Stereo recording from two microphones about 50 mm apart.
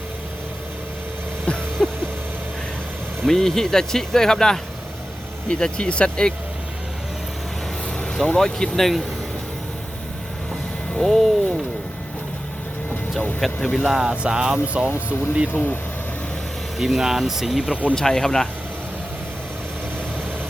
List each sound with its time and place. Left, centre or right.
1.5 s a sound: centre
3.2 s speech: centre
7.9 s speech: centre
10.9 s speech: centre
13.4 s speech: centre
13.8 s speech: centre
14.2 s speech: centre
15.5 s speech: left
16.7 s speech: centre
17.9 s speech: centre